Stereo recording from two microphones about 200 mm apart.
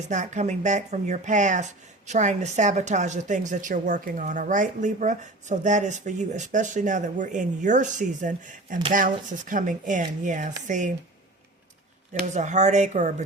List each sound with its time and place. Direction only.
0.1 s speech: 35° right (ahead or behind)
12.2 s speech: 35° right (ahead or behind)